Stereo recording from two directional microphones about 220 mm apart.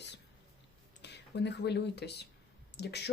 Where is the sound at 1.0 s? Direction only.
50° left (ahead or behind).